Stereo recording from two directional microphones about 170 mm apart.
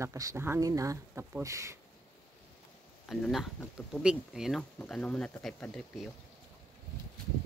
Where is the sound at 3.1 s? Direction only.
Centre (ahead or behind).